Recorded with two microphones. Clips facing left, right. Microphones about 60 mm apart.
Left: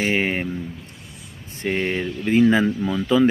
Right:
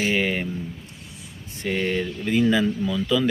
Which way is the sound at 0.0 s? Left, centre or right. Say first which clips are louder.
Left 1 dB; left.